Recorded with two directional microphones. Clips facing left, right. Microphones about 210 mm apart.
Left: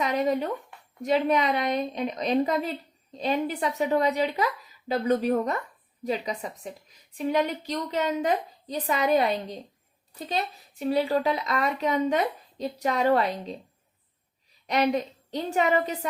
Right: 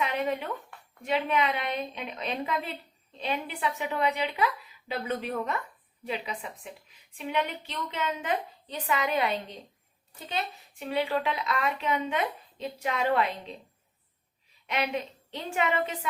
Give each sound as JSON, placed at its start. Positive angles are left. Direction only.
{"t": 0.0, "sound": "a woman's voice", "side_deg": 40}
{"t": 14.7, "sound": "a woman's voice", "side_deg": 40}